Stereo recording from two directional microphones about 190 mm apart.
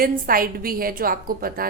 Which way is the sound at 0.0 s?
50° right (ahead or behind).